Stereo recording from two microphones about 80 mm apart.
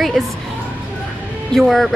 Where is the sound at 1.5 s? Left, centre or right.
Centre.